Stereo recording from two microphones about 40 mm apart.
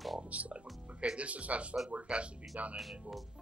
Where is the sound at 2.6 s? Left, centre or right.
Right.